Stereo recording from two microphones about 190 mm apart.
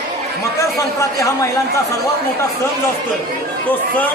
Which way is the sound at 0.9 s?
15° left (ahead or behind).